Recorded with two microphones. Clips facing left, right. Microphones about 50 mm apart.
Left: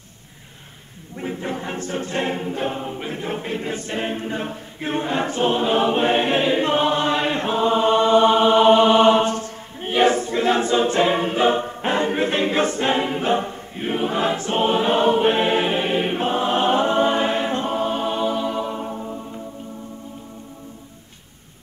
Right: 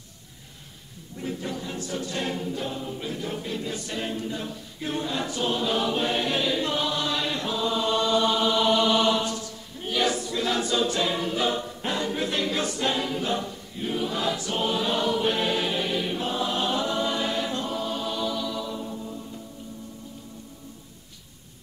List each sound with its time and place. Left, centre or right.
1.1 s choir: left